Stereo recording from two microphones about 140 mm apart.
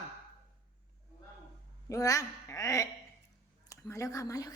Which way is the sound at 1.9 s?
25° left (ahead or behind).